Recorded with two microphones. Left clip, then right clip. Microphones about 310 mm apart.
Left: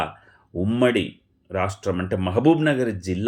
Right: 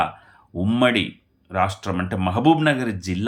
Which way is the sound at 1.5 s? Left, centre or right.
Centre.